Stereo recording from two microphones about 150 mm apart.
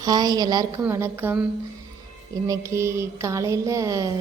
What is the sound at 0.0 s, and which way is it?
Speech, 25° right (ahead or behind).